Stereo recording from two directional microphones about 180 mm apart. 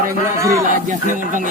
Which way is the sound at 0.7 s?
45° right (ahead or behind).